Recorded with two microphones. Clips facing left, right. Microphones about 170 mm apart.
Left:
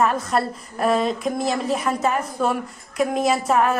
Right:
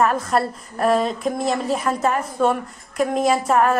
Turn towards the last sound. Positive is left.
turn(degrees=0)  # may be behind; listen again after turning